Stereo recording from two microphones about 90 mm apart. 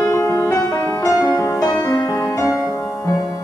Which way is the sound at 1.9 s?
45° left (ahead or behind).